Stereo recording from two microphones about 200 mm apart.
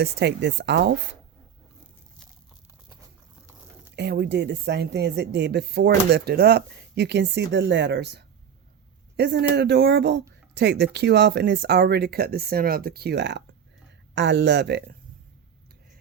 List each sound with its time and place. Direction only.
0.0 s speech: 60° right (ahead or behind)
3.9 s speech: 55° right (ahead or behind)